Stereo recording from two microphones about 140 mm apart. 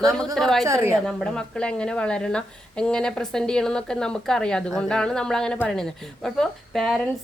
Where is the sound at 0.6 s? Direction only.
20° right (ahead or behind).